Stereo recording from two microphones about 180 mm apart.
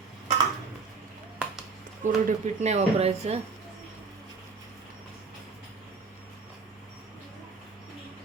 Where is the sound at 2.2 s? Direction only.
40° right (ahead or behind).